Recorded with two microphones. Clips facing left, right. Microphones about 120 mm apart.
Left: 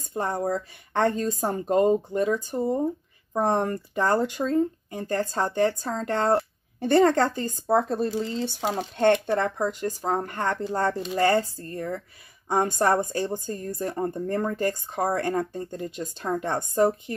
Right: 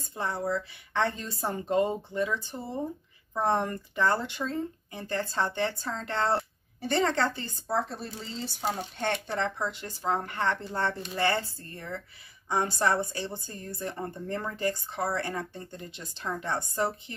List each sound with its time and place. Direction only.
0.1 s speech: 45° left (ahead or behind)
8.1 s speech: 80° left; by 16.9 s 45° left (ahead or behind)